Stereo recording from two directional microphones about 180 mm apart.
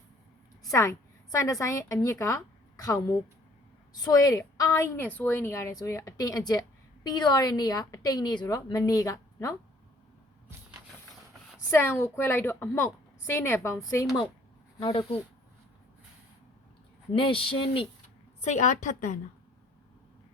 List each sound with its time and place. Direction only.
0.6 s a woman's voice: 15° left (ahead or behind)
11.7 s a woman's voice: 15° left (ahead or behind)
14.8 s speech: 30° left (ahead or behind)
17.2 s speech: 30° left (ahead or behind)
18.4 s a woman's voice: 40° left (ahead or behind)